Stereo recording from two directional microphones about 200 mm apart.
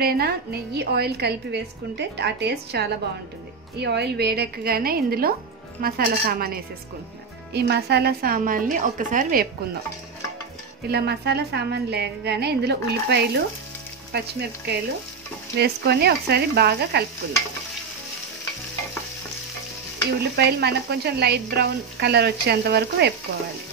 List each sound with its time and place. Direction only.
0.0 s a woman's voice: 50° right (ahead or behind)
10.9 s a woman's voice: 55° right (ahead or behind)
20.2 s speech: 55° right (ahead or behind)